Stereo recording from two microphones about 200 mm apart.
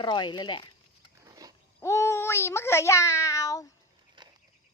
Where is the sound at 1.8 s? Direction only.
15° left (ahead or behind).